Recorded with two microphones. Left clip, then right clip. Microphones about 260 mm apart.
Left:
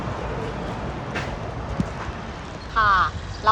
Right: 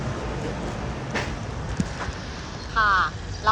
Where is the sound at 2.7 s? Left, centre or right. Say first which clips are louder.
Left 2 dB; centre.